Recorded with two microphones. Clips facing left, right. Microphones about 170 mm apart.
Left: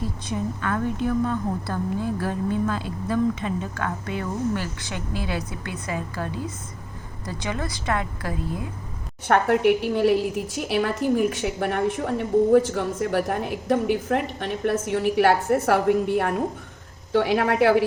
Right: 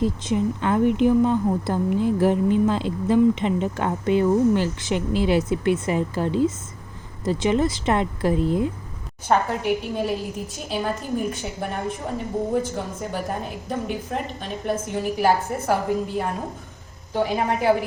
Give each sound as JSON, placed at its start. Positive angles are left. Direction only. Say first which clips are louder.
{"t": 0.3, "sound": "speech", "louder": "right 2 dB", "side_deg": -20}
{"t": 9.2, "sound": "a woman's voice", "louder": "left 3 dB", "side_deg": 65}